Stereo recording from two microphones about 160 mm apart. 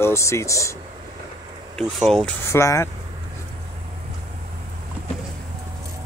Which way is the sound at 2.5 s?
20° left (ahead or behind).